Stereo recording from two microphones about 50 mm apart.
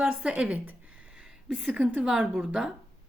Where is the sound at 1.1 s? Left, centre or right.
Centre.